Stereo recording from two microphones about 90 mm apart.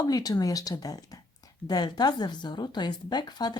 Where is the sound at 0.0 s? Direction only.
45° left (ahead or behind).